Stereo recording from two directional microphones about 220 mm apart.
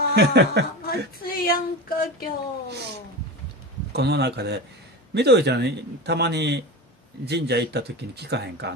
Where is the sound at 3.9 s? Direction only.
50° right (ahead or behind).